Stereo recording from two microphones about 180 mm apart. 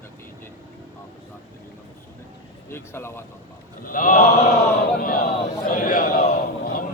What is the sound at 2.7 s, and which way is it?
Speech, 15° left (ahead or behind).